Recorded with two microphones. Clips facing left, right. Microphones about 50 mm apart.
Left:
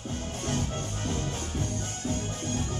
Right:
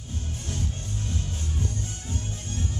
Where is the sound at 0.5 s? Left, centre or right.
Left.